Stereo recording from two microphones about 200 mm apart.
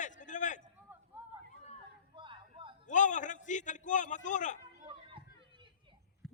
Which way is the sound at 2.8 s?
40° left (ahead or behind).